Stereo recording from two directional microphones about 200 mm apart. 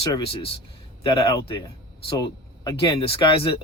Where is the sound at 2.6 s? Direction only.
25° left (ahead or behind).